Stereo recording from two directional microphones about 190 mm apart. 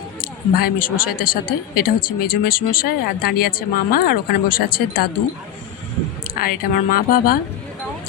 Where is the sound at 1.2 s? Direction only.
50° left (ahead or behind).